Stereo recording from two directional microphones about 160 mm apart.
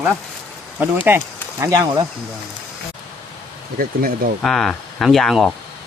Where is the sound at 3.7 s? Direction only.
65° right (ahead or behind).